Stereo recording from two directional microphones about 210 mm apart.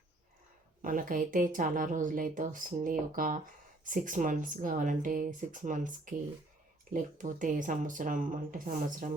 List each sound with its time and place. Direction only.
0.8 s speech: 40° right (ahead or behind)